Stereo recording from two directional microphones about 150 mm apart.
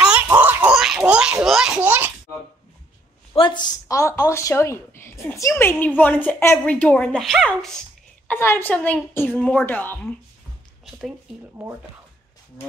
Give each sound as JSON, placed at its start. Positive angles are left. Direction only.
{"t": 0.0, "sound": "a sound", "side_deg": -10}
{"t": 3.3, "sound": "a woman's voice", "side_deg": 30}
{"t": 8.3, "sound": "a woman's voice", "side_deg": 15}
{"t": 11.6, "sound": "speech", "side_deg": -5}